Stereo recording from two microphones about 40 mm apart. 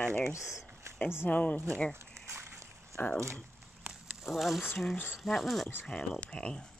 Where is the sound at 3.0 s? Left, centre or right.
Left.